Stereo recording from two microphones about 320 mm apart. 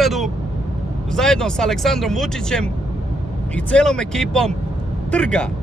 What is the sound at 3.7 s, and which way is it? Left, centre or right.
A man's voice, centre.